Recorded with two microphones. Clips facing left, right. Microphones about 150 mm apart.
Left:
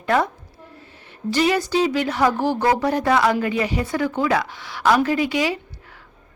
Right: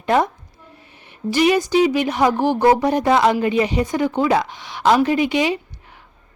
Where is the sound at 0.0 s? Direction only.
20° right (ahead or behind).